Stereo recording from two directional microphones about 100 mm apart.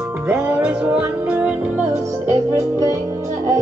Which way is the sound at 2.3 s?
30° right (ahead or behind).